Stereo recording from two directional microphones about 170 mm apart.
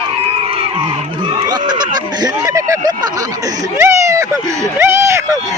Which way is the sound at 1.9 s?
25° right (ahead or behind).